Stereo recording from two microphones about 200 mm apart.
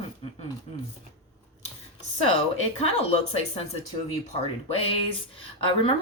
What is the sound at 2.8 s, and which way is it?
Speech, 30° left (ahead or behind).